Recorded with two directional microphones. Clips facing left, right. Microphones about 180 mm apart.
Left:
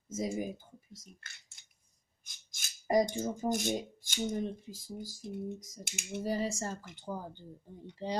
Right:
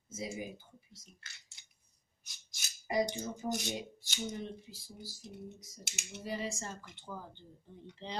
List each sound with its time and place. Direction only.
0.1 s speech: 45° left (ahead or behind)
7.1 s speech: 30° left (ahead or behind)
8.0 s speech: 10° left (ahead or behind)